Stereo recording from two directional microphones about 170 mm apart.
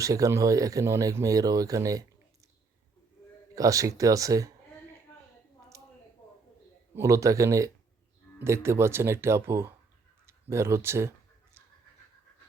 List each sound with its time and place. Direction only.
0.0 s speech: 20° right (ahead or behind)
3.5 s speech: 20° right (ahead or behind)
5.7 s a sound: 20° right (ahead or behind)
6.9 s speech: 20° right (ahead or behind)